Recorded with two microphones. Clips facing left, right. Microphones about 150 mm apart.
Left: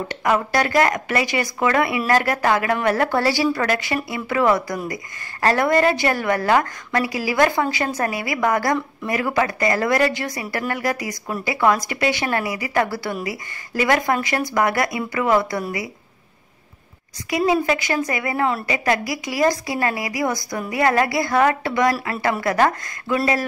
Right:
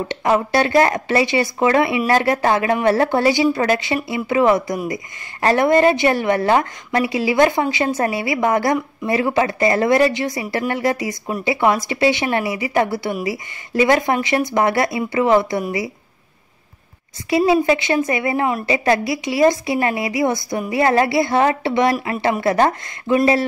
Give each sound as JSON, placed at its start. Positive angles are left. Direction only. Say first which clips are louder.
{"t": 0.1, "sound": "speech", "louder": "right 3 dB", "side_deg": -25}
{"t": 17.3, "sound": "speech", "louder": "right 4 dB", "side_deg": -25}